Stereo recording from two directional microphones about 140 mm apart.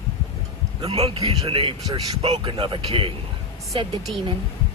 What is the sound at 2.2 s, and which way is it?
Speech, 45° right (ahead or behind).